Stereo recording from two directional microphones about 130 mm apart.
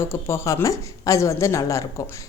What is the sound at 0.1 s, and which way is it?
A woman's voice, 20° left (ahead or behind).